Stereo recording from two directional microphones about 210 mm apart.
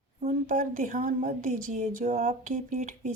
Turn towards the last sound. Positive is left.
turn(degrees=-35)  # may be behind; listen again after turning